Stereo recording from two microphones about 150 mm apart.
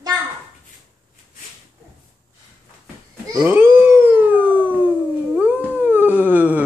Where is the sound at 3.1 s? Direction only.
15° right (ahead or behind).